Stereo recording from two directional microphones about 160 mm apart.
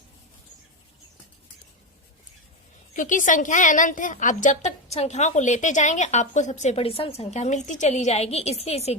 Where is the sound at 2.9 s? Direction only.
55° left (ahead or behind).